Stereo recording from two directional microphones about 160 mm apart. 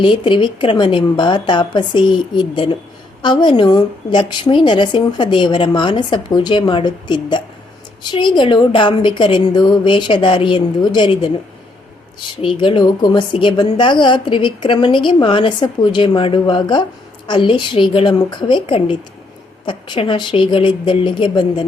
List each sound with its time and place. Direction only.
0.0 s a woman's voice: 30° left (ahead or behind)
12.4 s a woman's voice: 30° left (ahead or behind)